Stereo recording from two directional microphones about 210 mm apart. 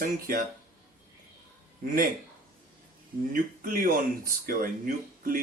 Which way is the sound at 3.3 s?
40° right (ahead or behind).